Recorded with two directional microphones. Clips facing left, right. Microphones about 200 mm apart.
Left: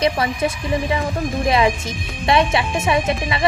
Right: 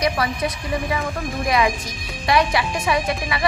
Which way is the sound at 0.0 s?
25° left (ahead or behind).